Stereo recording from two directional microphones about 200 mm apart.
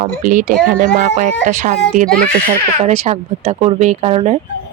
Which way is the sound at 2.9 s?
30° right (ahead or behind).